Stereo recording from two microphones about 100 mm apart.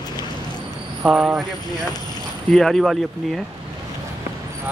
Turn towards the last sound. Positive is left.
turn(degrees=0)  # may be behind; listen again after turning